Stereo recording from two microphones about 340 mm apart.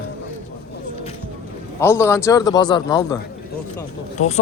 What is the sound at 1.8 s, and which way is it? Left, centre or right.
A man's voice, centre.